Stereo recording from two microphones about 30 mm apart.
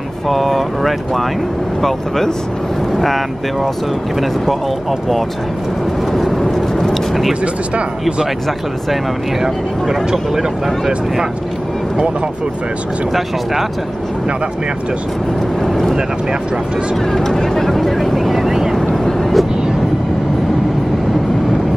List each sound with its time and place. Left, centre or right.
0.3 s speech: centre
6.1 s vehicle: centre
6.4 s vehicle: centre
15.6 s vehicle: centre
17.1 s speech: centre
17.6 s speech: centre
18.5 s vehicle: centre
19.0 s vehicle: centre